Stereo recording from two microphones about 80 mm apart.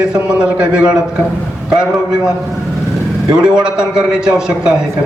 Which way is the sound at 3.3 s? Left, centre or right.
Centre.